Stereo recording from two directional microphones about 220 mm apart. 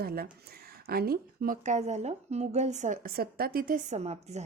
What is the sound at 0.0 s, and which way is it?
Speech, 45° right (ahead or behind).